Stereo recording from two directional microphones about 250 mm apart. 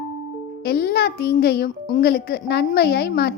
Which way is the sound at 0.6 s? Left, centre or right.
Left.